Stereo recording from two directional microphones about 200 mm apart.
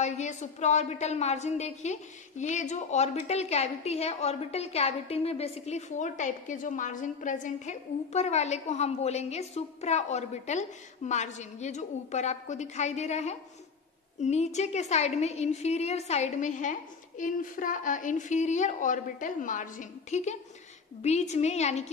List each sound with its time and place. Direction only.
0.0 s a woman's voice: 35° left (ahead or behind)